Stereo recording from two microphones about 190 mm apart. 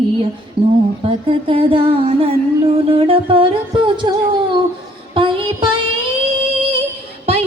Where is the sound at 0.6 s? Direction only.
30° right (ahead or behind).